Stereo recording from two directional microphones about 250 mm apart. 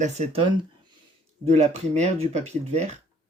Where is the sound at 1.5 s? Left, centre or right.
Right.